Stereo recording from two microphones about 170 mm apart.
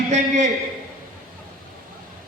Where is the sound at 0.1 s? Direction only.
45° right (ahead or behind).